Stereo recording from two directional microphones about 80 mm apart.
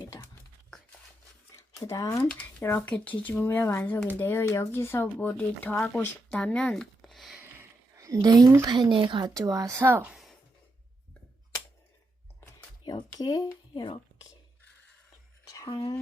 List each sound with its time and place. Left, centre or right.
1.7 s speech: left
2.3 s speech: left; by 7.3 s centre
7.6 s a sound: right
8.6 s a woman's voice: right
9.3 s speech: right
12.8 s speech: left
13.7 s speech: left
15.6 s speech: left